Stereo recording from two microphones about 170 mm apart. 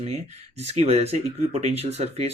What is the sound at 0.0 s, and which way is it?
Speech, 40° right (ahead or behind).